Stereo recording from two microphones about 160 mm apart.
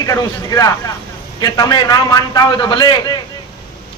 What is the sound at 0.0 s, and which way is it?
A man's voice, 20° left (ahead or behind).